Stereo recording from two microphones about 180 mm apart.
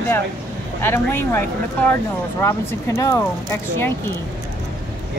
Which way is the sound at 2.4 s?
15° left (ahead or behind).